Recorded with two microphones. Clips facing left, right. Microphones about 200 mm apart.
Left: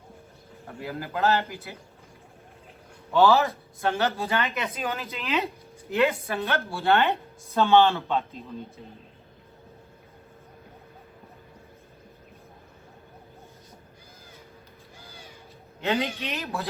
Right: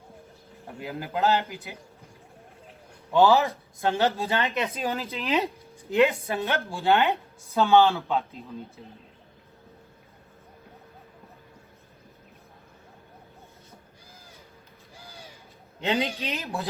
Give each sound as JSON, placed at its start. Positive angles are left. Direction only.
{"t": 0.8, "sound": "speech", "side_deg": -15}
{"t": 3.1, "sound": "speech", "side_deg": -15}
{"t": 4.2, "sound": "speech", "side_deg": -25}
{"t": 5.9, "sound": "a woman's voice", "side_deg": -20}
{"t": 16.0, "sound": "speech", "side_deg": -30}